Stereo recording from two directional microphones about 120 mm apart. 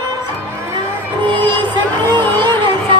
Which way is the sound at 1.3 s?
40° right (ahead or behind).